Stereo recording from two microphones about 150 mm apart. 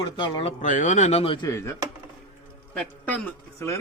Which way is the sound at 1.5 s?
20° left (ahead or behind).